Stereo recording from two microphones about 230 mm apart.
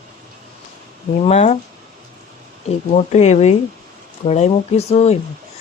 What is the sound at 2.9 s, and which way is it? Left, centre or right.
A woman's voice, left.